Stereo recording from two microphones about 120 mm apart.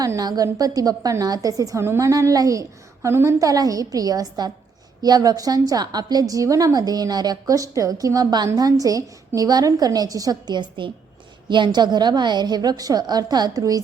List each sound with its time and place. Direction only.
0.0 s a woman's voice: 30° right (ahead or behind)